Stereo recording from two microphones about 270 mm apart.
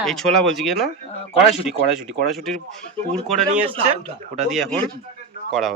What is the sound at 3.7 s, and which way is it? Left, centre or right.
Speech, right.